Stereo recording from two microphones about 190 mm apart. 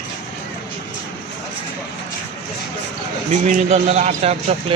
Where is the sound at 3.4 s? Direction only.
35° right (ahead or behind).